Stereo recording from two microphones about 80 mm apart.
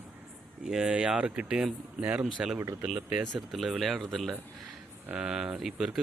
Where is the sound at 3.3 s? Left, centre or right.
Centre.